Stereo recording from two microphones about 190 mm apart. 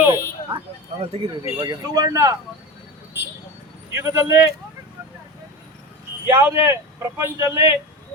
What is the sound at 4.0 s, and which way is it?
Speech, 15° right (ahead or behind).